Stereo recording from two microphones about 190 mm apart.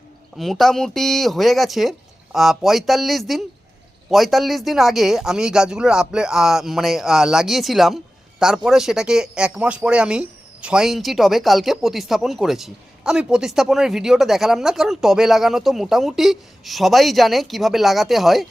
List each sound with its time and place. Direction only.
0.3 s speech: centre (ahead or behind)